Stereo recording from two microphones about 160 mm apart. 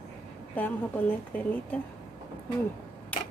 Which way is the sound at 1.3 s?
10° left (ahead or behind).